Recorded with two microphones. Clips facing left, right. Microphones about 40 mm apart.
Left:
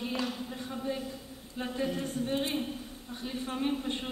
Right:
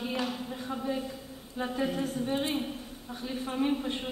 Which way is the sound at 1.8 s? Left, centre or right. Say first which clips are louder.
Right 2 dB; right.